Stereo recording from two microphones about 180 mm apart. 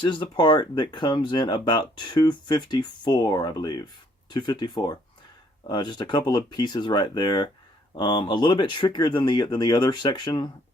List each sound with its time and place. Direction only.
0.0 s speech: 25° left (ahead or behind)